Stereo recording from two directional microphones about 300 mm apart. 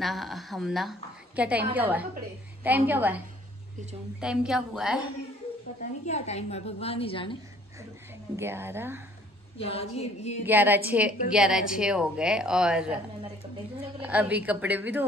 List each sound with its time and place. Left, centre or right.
0.0 s a woman's voice: centre
4.2 s a woman's voice: centre
5.8 s a woman's voice: left
8.4 s a woman's voice: centre
9.6 s a woman's voice: centre
10.4 s a woman's voice: centre
14.0 s a woman's voice: centre